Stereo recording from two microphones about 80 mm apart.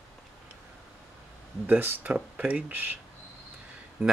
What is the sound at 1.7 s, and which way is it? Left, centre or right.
Speech, right.